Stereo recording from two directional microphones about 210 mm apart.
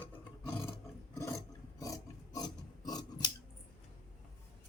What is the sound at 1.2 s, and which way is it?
Filing, 15° left (ahead or behind).